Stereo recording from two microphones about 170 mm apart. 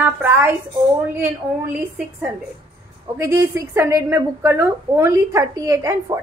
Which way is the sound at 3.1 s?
15° right (ahead or behind).